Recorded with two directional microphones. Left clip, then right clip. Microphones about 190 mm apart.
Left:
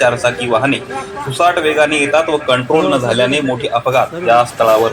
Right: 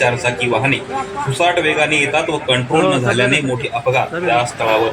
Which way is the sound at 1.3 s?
10° left (ahead or behind).